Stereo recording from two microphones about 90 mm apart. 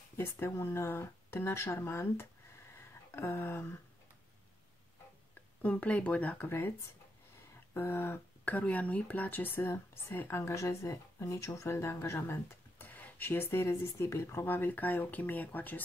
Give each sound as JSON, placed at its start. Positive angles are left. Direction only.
{"t": 0.2, "sound": "speech", "side_deg": 30}
{"t": 2.7, "sound": "a sound", "side_deg": 30}
{"t": 5.6, "sound": "speech", "side_deg": 20}
{"t": 7.7, "sound": "speech", "side_deg": 25}